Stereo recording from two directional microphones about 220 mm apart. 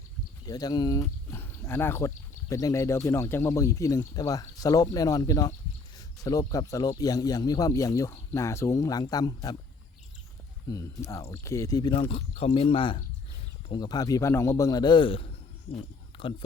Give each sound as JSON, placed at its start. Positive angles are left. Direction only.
{"t": 0.4, "sound": "speech", "side_deg": 15}
{"t": 10.7, "sound": "speech", "side_deg": 15}
{"t": 16.1, "sound": "a sound", "side_deg": 25}